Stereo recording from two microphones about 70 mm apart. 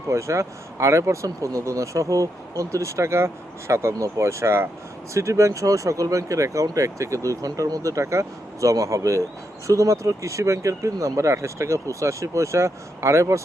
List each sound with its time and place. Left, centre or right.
0.1 s speech: right